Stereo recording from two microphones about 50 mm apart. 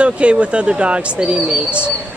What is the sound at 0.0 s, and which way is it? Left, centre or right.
Speech, right.